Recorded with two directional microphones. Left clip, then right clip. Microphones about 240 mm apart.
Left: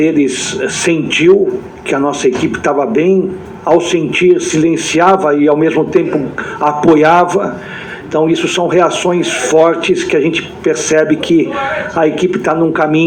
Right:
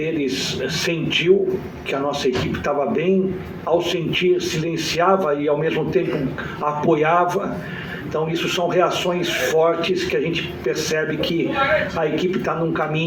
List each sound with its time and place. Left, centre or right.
0.0 s rub: left